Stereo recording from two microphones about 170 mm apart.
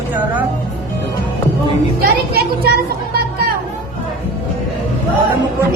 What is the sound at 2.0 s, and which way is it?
A child's voice, 65° right (ahead or behind).